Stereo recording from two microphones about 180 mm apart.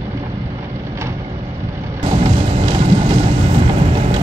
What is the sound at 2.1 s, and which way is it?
Thunder, 30° right (ahead or behind).